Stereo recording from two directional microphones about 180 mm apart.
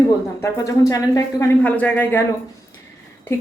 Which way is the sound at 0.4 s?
15° left (ahead or behind).